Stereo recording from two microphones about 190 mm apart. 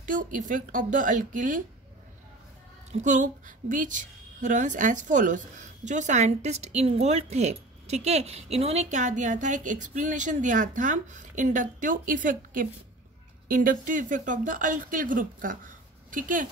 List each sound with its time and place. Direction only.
0.0 s speech: 45° right (ahead or behind)
2.9 s a woman's voice: 40° right (ahead or behind)